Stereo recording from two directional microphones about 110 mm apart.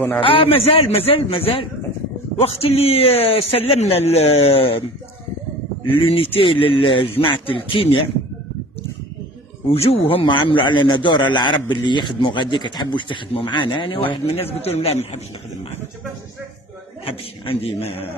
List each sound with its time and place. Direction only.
0.2 s a man's voice: 55° left (ahead or behind)
5.9 s a man's voice: 55° left (ahead or behind)
9.7 s a man's voice: 60° left (ahead or behind); by 14.0 s 45° left (ahead or behind)
14.2 s a man's voice: 65° left (ahead or behind)
17.0 s a man's voice: 60° left (ahead or behind)